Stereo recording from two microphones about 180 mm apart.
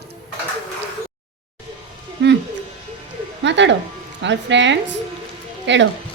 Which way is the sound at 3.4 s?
80° right.